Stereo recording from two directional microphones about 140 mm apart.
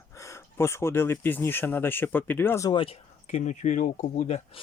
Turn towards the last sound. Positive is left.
turn(degrees=55)  # may be behind; listen again after turning